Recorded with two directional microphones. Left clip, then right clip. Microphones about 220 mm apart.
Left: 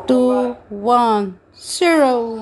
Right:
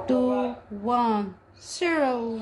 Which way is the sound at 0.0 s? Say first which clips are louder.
Left 9 dB; 30° left (ahead or behind).